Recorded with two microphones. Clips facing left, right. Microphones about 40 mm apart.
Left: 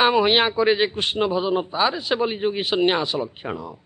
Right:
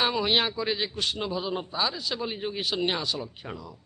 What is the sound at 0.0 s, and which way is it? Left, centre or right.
A man's voice, left.